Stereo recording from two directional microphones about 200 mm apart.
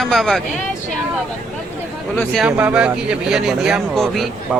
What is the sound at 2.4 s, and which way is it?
Speech, 5° right (ahead or behind).